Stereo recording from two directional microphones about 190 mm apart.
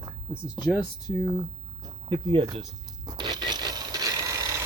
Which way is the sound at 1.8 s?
25° right (ahead or behind).